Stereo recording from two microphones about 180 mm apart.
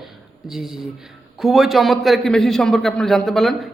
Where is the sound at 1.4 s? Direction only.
Centre (ahead or behind).